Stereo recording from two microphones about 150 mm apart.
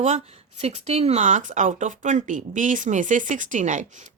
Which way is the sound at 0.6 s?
45° right (ahead or behind).